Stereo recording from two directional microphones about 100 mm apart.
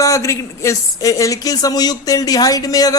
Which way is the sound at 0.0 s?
30° left (ahead or behind).